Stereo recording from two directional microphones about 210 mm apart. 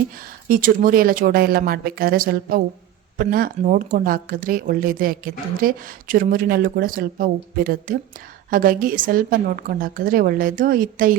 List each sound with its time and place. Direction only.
0.2 s a woman's voice: 40° right (ahead or behind)